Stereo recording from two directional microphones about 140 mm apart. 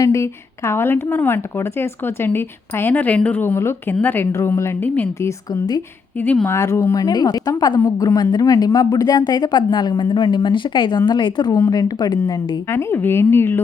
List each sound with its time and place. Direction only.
0.0 s a woman's voice: 20° left (ahead or behind)
12.7 s a woman's voice: 15° left (ahead or behind)